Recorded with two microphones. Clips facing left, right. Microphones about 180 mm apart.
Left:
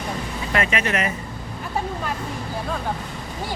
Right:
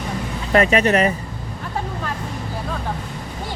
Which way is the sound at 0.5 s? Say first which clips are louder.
Right 8 dB; 35° right (ahead or behind).